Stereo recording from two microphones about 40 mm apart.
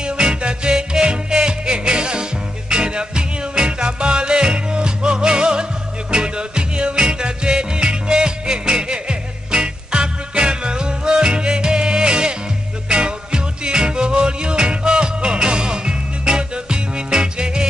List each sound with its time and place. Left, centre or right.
0.0 s music: right